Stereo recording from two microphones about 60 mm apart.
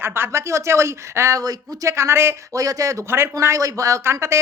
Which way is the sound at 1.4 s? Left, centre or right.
Right.